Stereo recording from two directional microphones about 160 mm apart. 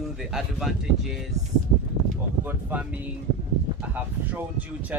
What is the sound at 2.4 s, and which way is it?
Speech, 10° right (ahead or behind).